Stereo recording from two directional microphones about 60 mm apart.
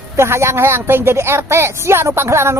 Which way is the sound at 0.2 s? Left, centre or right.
Right.